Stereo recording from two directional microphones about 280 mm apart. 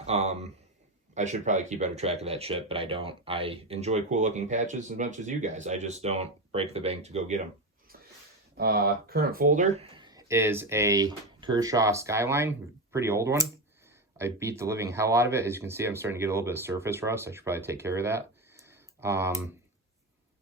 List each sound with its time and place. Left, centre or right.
0.0 s speech: right
8.5 s speech: right; by 19.5 s centre